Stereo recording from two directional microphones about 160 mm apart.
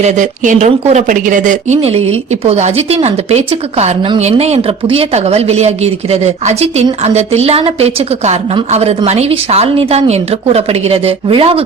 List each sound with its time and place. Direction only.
0.0 s speech: 50° right (ahead or behind)